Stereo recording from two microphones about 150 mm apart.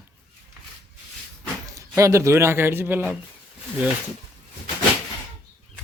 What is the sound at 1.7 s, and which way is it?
A man's voice, 20° right (ahead or behind).